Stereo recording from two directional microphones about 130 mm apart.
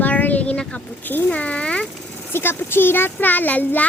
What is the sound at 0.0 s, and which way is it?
A child's voice, 15° left (ahead or behind).